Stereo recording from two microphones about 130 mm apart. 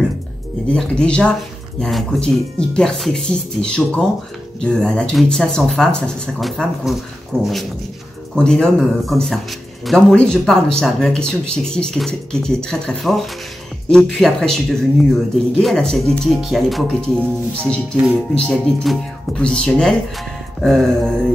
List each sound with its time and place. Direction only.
0.7 s speech: 5° left (ahead or behind)
7.3 s dog: 15° right (ahead or behind)
8.4 s speech: 5° left (ahead or behind)